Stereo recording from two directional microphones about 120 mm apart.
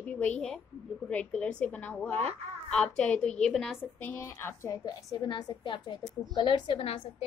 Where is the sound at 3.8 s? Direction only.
20° left (ahead or behind).